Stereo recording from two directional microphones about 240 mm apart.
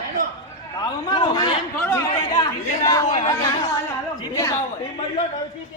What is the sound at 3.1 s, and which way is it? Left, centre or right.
Speech, centre.